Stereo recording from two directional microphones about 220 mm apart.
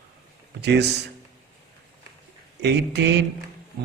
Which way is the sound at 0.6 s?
50° right (ahead or behind).